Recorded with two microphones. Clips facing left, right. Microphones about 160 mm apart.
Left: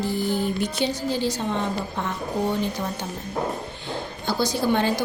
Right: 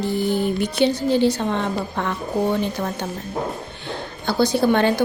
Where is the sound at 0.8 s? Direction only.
65° right (ahead or behind).